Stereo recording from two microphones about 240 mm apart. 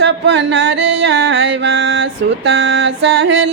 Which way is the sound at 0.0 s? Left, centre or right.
Right.